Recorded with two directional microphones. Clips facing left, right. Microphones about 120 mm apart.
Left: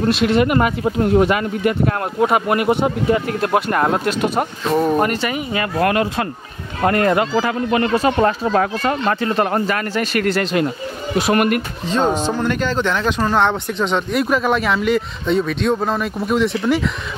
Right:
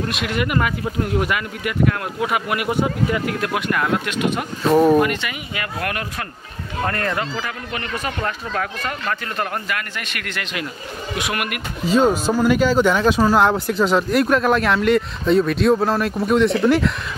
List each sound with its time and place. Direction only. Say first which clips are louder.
0.0 s speech: left 8 dB; 30° left (ahead or behind)
7.3 s speech: left 11 dB; 35° left (ahead or behind)
11.8 s speech: right 4 dB; 5° right (ahead or behind)